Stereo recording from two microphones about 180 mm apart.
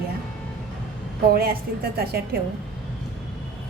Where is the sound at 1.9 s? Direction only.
60° right (ahead or behind).